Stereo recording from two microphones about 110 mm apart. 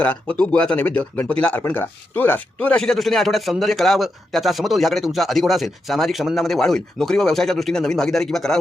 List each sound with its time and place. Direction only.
0.0 s speech: 10° left (ahead or behind)